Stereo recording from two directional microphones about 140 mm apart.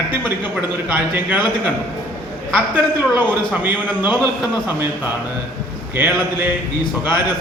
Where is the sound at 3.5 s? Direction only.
10° right (ahead or behind).